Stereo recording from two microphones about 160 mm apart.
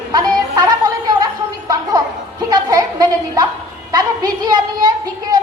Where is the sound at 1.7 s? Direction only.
25° right (ahead or behind).